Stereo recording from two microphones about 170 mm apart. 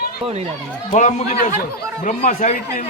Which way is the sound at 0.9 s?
45° left (ahead or behind).